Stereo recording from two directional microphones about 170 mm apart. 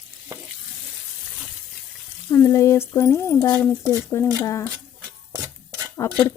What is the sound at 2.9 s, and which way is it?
Speech, 15° left (ahead or behind).